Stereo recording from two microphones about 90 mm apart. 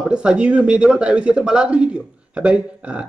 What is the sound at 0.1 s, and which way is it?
Speech, 10° right (ahead or behind).